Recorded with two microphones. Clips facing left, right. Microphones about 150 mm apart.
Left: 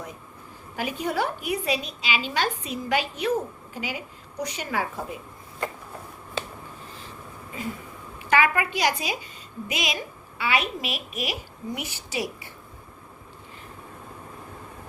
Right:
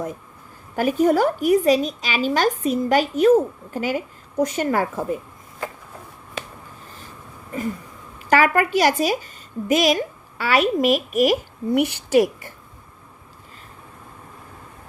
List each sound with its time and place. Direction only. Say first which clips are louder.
0.8 s a woman's voice: right 10 dB; 45° right (ahead or behind)
8.3 s a woman's voice: right 5 dB; 40° right (ahead or behind)